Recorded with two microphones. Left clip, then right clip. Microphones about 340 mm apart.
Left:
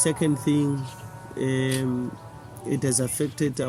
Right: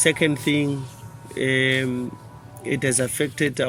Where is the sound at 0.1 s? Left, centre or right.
Right.